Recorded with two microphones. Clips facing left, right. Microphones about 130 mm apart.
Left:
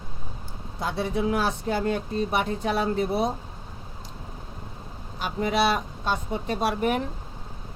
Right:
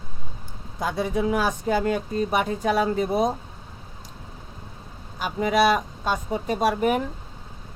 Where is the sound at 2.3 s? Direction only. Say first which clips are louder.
Right 4 dB; 45° right (ahead or behind).